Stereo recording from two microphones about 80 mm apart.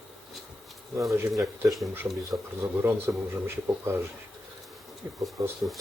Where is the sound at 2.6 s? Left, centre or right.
Right.